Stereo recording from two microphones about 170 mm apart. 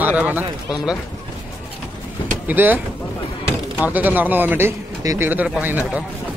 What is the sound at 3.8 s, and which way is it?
A man's voice, 10° right (ahead or behind).